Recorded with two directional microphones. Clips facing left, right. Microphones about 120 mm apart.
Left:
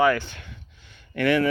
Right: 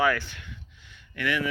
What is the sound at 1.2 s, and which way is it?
Speech, 35° left (ahead or behind).